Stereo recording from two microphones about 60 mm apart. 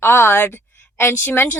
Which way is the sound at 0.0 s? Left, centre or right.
Left.